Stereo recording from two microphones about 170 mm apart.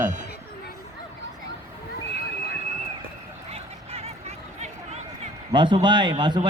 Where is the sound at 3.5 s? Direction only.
35° right (ahead or behind).